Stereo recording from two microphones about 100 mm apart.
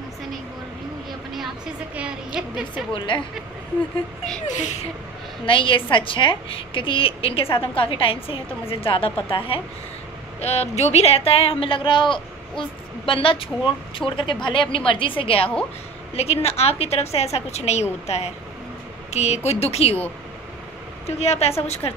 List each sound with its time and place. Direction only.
2.0 s a woman's voice: 10° right (ahead or behind)
3.1 s speech: 55° left (ahead or behind)
5.5 s speech: 60° left (ahead or behind)
10.4 s speech: 90° left; by 15.5 s 70° left (ahead or behind)
16.2 s a woman's voice: 90° left
21.2 s a woman's voice: 90° left